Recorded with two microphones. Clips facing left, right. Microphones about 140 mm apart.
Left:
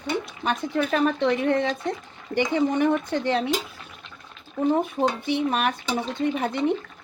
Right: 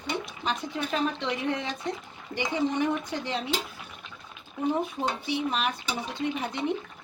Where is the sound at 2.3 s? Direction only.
55° left (ahead or behind).